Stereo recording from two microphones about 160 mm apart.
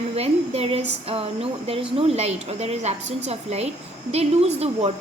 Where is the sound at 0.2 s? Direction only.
40° right (ahead or behind).